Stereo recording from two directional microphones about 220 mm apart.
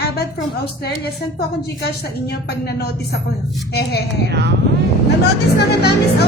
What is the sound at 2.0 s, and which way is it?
Speech, 45° left (ahead or behind).